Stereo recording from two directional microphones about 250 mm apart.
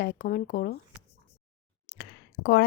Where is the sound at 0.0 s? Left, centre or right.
Left.